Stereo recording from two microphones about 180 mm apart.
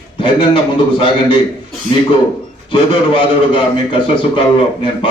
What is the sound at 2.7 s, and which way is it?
A man's voice, 30° left (ahead or behind).